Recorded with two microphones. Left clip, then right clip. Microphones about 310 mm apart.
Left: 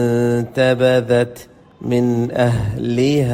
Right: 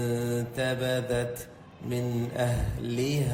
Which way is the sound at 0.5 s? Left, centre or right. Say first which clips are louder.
Left 16 dB; left.